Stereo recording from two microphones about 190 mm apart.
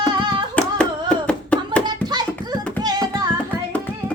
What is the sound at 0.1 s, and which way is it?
Singing, 25° right (ahead or behind).